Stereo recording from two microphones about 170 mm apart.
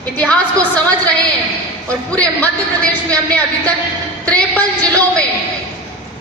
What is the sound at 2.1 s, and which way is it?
A man's voice, 10° left (ahead or behind).